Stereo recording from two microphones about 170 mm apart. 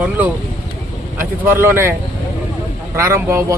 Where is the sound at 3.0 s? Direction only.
15° right (ahead or behind).